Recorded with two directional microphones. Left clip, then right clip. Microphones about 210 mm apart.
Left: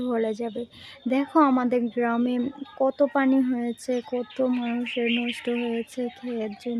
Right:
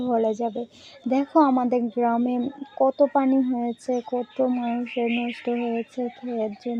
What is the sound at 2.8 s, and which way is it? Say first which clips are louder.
Speech: right 2 dB; 15° left (ahead or behind).